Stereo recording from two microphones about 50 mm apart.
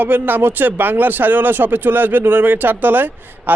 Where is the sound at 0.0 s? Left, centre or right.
Right.